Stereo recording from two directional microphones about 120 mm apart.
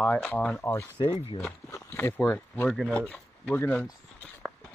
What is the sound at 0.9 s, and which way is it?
Speech, 45° left (ahead or behind).